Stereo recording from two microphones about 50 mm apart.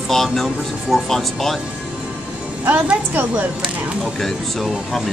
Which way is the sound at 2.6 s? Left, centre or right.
Right.